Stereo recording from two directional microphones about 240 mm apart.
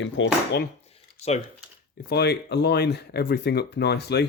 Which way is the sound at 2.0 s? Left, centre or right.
Left.